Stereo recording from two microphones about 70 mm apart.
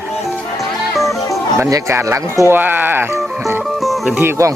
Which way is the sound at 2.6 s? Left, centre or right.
Right.